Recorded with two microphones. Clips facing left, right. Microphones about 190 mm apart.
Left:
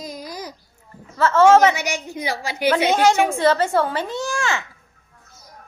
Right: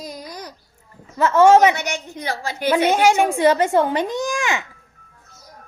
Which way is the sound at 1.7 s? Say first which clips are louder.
Even; 10° left (ahead or behind).